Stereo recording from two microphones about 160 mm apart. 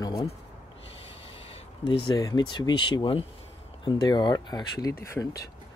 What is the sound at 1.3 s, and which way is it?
Speech, 40° left (ahead or behind).